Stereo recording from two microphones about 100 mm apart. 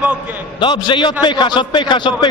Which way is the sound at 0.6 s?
50° left (ahead or behind).